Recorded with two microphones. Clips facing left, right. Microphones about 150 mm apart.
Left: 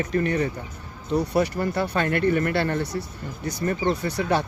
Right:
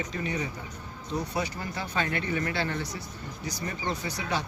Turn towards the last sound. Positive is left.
turn(degrees=60)  # may be behind; listen again after turning